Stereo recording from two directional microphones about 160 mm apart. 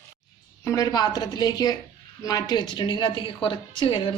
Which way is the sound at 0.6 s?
20° left (ahead or behind).